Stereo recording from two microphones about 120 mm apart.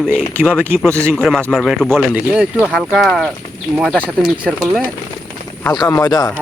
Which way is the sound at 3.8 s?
10° right (ahead or behind).